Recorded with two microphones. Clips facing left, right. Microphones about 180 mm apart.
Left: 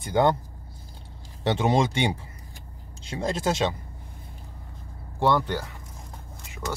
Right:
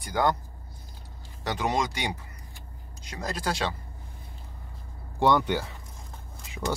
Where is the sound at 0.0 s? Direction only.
25° left (ahead or behind).